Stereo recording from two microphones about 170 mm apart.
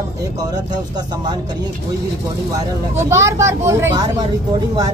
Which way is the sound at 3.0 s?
15° right (ahead or behind).